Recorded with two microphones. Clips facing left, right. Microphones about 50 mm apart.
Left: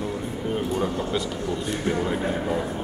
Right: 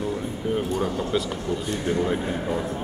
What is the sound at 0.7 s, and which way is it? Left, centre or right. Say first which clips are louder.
Speech: right 1 dB; centre.